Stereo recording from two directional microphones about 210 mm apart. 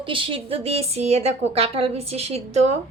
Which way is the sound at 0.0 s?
25° right (ahead or behind).